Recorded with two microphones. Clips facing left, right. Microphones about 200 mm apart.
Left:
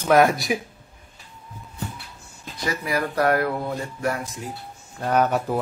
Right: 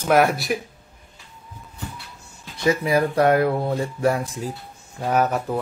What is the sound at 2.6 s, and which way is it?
Speech, 25° right (ahead or behind).